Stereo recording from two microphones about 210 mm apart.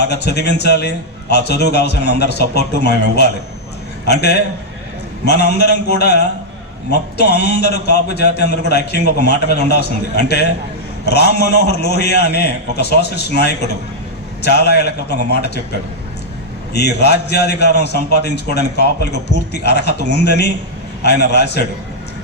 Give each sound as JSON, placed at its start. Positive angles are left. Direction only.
{"t": 0.0, "sound": "a man's voice", "side_deg": 50}
{"t": 16.7, "sound": "a man's voice", "side_deg": 50}